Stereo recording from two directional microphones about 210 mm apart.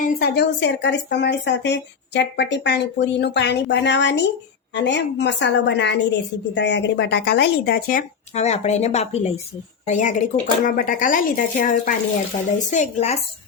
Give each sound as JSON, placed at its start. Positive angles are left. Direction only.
{"t": 0.0, "sound": "speech", "side_deg": 50}